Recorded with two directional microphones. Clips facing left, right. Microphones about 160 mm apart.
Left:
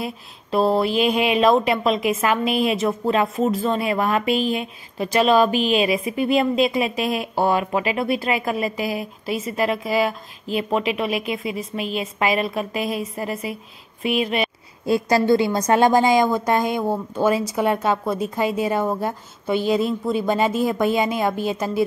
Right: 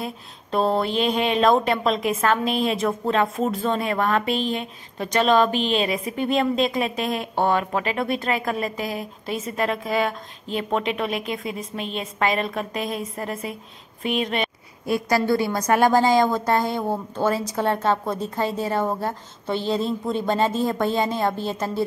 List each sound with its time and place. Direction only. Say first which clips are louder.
0.0 s speech: left 2 dB; 5° left (ahead or behind)
14.9 s a woman's voice: left 4 dB; 25° left (ahead or behind)